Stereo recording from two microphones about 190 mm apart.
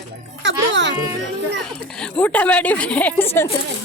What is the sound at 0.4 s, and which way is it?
Speech, 70° right (ahead or behind).